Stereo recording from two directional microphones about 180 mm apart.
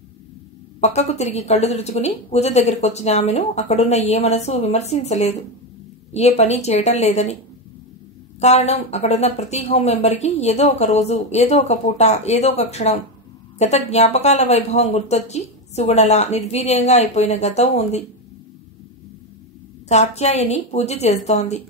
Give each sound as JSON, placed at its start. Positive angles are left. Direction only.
{"t": 0.7, "sound": "speech", "side_deg": 40}
{"t": 8.4, "sound": "speech", "side_deg": 35}
{"t": 19.9, "sound": "speech", "side_deg": 35}